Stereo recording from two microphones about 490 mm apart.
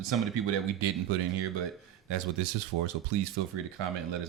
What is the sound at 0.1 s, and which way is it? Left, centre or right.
Speech, right.